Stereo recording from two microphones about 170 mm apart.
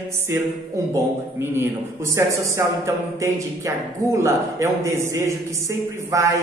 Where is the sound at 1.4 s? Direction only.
15° right (ahead or behind).